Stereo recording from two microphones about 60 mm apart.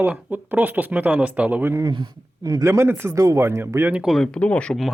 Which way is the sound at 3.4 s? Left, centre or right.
Right.